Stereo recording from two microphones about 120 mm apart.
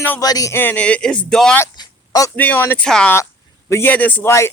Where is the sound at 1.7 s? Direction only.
30° left (ahead or behind).